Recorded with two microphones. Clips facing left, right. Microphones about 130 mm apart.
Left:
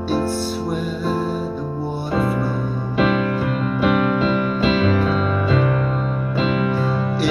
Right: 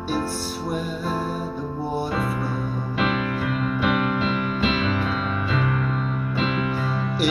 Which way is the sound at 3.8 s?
40° left (ahead or behind).